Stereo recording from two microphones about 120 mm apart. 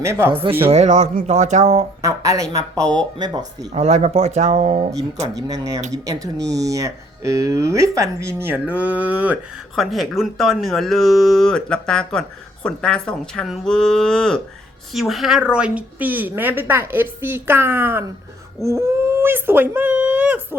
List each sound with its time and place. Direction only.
0.0 s speech: 20° right (ahead or behind)
0.7 s speech: 75° right (ahead or behind)
2.0 s speech: 25° right (ahead or behind)
3.7 s speech: 65° right (ahead or behind)
5.4 s speech: 30° right (ahead or behind)
8.4 s a woman's voice: 10° right (ahead or behind)
9.7 s a woman's voice: centre (ahead or behind)